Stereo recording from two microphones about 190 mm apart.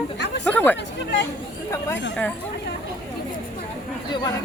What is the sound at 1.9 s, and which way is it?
Speech, 5° left (ahead or behind).